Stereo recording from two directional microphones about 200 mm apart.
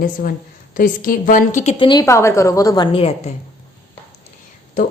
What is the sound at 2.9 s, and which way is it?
Speech, 30° left (ahead or behind).